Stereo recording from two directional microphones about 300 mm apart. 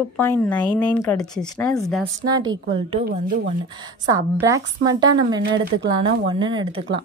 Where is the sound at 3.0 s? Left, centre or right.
Right.